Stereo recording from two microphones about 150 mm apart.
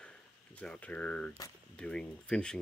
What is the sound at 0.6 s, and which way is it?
Speech, 10° left (ahead or behind).